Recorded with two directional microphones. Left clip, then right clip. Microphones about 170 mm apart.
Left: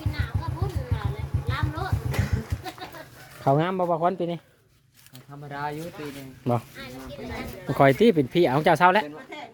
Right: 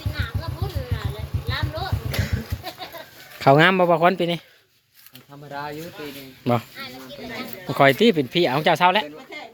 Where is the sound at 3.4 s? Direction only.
15° right (ahead or behind).